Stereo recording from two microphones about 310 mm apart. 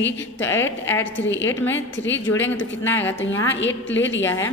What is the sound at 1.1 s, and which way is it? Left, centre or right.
A woman's voice, left.